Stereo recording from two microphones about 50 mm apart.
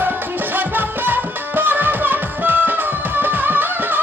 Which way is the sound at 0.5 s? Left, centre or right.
Right.